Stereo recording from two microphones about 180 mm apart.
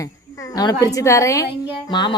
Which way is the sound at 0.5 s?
20° left (ahead or behind).